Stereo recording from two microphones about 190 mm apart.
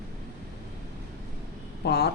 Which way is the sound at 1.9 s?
60° left (ahead or behind).